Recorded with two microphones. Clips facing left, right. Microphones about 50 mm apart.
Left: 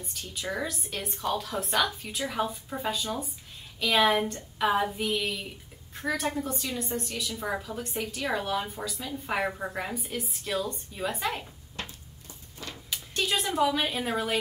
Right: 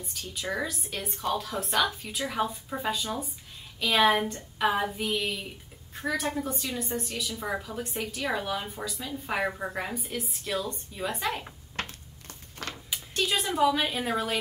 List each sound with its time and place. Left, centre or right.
0.0 s a woman's voice: centre
11.8 s a sound: right
13.1 s a woman's voice: centre